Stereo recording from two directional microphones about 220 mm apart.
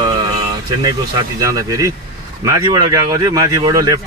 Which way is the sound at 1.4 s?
15° right (ahead or behind).